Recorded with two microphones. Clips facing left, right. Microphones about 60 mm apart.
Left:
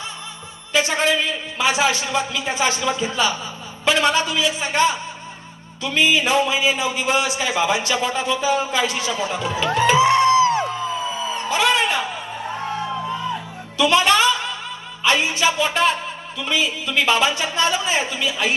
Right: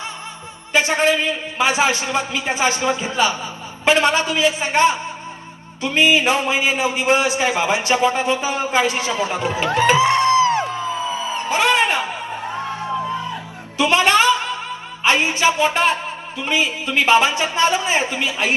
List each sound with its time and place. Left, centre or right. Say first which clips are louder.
0.7 s a man's voice: right 2 dB; right
11.4 s music: right 2 dB; right
13.7 s a man's voice: right 1 dB; right